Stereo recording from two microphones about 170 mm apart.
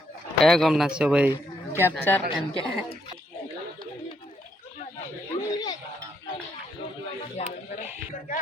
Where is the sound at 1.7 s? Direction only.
15° left (ahead or behind).